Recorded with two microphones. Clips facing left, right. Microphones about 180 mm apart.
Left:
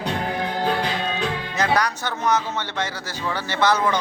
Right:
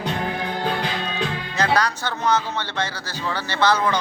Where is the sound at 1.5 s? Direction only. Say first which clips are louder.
Right 1 dB; 20° left (ahead or behind).